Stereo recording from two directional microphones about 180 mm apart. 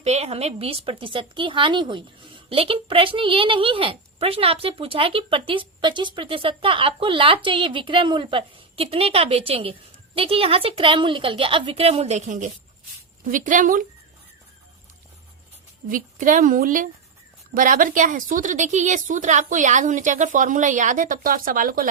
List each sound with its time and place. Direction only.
0.0 s a woman's voice: 35° right (ahead or behind)
15.9 s a woman's voice: 50° right (ahead or behind)